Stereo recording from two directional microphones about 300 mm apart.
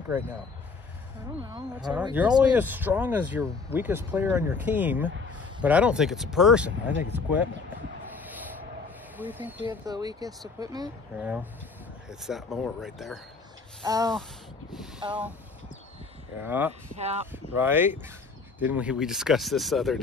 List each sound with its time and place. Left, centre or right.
1.4 s speech: centre
9.1 s speech: centre
13.8 s speech: centre
16.4 s speech: centre
16.9 s speech: right
17.6 s speech: centre